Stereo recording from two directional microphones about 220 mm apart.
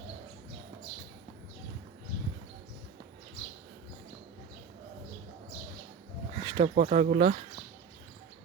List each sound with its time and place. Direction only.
6.4 s speech: 20° right (ahead or behind)